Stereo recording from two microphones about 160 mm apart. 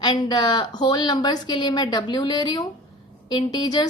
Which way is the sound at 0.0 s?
30° left (ahead or behind).